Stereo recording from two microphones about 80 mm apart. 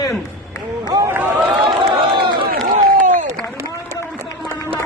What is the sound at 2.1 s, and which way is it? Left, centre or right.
Run, right.